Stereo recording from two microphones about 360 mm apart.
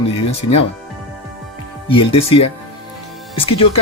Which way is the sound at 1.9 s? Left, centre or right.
Centre.